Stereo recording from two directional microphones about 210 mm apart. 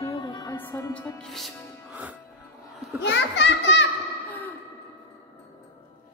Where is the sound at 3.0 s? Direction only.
55° left (ahead or behind).